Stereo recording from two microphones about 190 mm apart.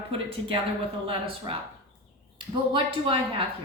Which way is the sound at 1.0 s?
30° right (ahead or behind).